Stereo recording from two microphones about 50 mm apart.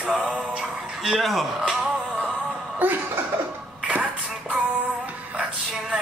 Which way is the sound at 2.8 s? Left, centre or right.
Right.